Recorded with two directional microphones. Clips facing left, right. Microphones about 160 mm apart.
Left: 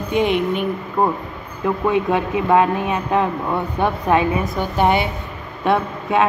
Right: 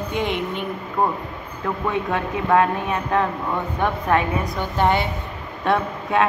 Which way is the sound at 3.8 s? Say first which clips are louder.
Left 3 dB; 10° left (ahead or behind).